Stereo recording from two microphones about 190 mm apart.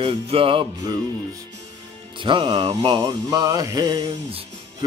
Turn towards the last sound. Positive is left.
turn(degrees=-25)  # may be behind; listen again after turning